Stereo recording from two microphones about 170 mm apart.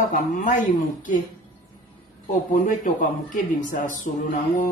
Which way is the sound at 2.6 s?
50° left (ahead or behind).